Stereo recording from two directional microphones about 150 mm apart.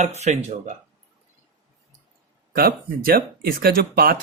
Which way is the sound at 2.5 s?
80° right.